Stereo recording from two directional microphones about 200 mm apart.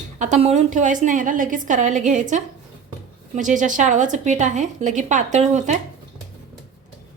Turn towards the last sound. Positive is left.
turn(degrees=-35)  # may be behind; listen again after turning